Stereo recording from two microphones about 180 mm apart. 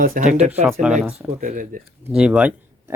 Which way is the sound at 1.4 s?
45° right (ahead or behind).